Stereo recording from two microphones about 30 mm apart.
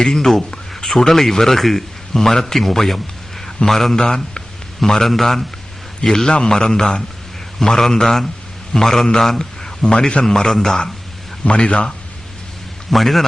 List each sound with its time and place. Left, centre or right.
0.0 s a man's voice: centre
3.9 s a man's voice: left
5.0 s a man's voice: centre
6.0 s a man's voice: centre
9.4 s a man's voice: left
10.2 s a man's voice: centre
11.4 s a man's voice: left
12.9 s a man's voice: centre